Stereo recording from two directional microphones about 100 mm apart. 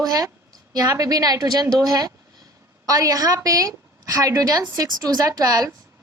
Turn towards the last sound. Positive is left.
turn(degrees=-35)  # may be behind; listen again after turning